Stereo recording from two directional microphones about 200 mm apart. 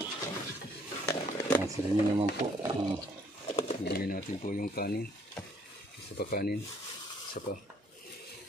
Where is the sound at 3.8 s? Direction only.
50° left (ahead or behind).